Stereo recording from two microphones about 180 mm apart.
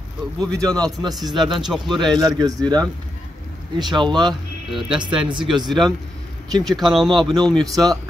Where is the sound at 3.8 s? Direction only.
25° right (ahead or behind).